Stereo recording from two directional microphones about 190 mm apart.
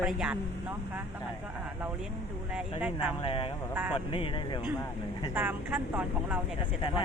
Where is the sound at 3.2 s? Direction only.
30° left (ahead or behind).